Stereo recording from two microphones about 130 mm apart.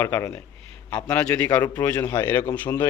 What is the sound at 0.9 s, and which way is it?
A man's voice, 10° left (ahead or behind).